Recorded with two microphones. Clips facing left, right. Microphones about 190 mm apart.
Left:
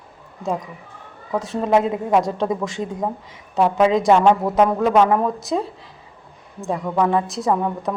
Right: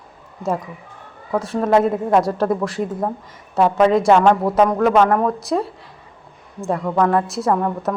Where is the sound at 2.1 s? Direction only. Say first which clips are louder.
Right 1 dB; centre (ahead or behind).